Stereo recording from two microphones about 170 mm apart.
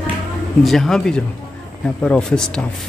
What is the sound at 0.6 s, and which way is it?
Speech, centre (ahead or behind).